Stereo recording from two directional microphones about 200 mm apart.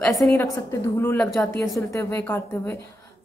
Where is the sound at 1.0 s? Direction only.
10° left (ahead or behind).